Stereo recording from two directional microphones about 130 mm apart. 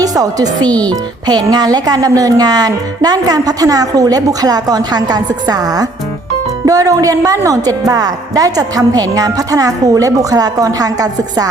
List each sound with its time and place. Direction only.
0.0 s speech: 30° right (ahead or behind)